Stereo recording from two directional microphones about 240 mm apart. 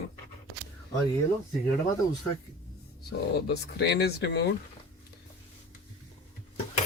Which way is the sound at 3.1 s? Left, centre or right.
Left.